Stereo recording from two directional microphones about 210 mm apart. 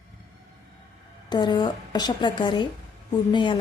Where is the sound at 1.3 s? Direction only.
20° left (ahead or behind).